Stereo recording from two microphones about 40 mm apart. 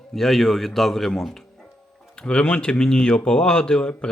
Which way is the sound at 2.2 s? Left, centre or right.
Left.